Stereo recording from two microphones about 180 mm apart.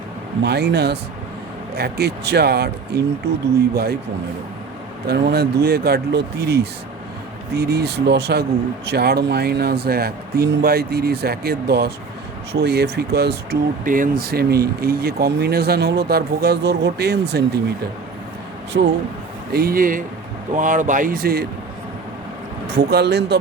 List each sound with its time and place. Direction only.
0.4 s speech: 65° right (ahead or behind)
5.0 s speech: 65° right (ahead or behind)
13.8 s speech: 50° right (ahead or behind)
14.3 s speech: 60° right (ahead or behind)
18.7 s speech: 75° right (ahead or behind)
19.5 s speech: 55° right (ahead or behind)
22.7 s speech: 65° right (ahead or behind)